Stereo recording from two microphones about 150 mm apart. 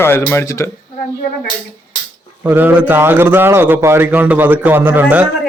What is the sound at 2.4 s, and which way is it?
A man's voice, 15° right (ahead or behind).